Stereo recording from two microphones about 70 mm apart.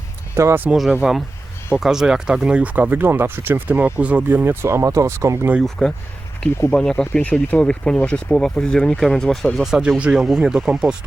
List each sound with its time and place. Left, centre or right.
0.4 s speech: right
0.7 s speech: centre
4.3 s speech: right
5.8 s speech: centre
9.6 s speech: centre